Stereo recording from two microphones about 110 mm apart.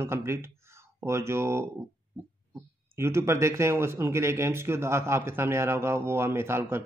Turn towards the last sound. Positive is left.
turn(degrees=-20)  # may be behind; listen again after turning